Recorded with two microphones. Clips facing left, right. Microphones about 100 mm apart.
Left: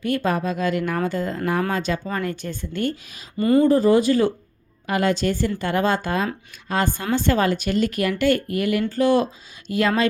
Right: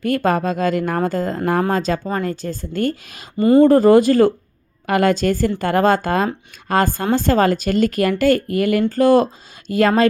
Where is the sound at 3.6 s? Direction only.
60° right (ahead or behind).